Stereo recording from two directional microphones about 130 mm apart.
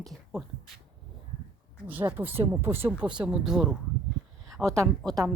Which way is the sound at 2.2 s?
15° right (ahead or behind).